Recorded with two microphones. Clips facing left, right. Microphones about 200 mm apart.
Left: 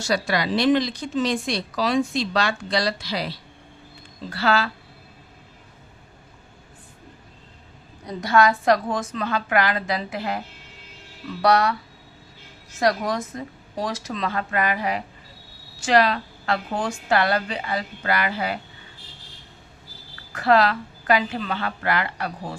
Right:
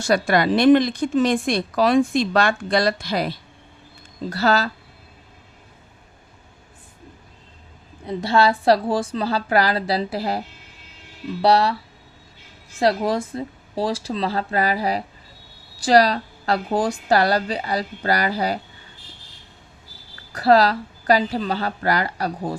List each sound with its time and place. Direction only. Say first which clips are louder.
0.0 s a woman's voice: right 5 dB; 55° right (ahead or behind)
8.0 s a woman's voice: right 1 dB; 30° right (ahead or behind)
11.4 s a woman's voice: right 2 dB; 30° right (ahead or behind)
12.8 s a woman's voice: right 3 dB; 30° right (ahead or behind)
20.3 s a woman's voice: right 3 dB; 35° right (ahead or behind)